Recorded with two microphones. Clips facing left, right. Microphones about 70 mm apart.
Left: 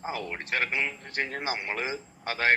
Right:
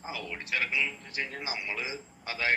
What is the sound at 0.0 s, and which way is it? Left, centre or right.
A man's voice, left.